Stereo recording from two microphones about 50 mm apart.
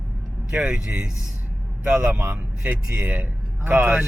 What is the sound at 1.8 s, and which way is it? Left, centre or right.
A man's voice, right.